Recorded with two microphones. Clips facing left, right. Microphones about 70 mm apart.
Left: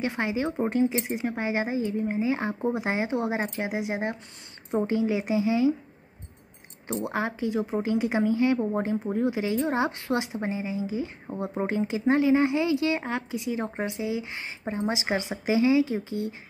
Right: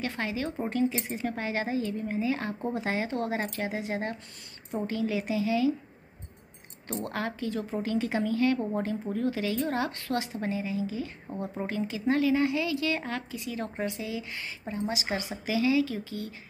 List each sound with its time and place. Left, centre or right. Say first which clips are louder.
0.0 s speech: left 4 dB; left
6.9 s speech: left 4 dB; centre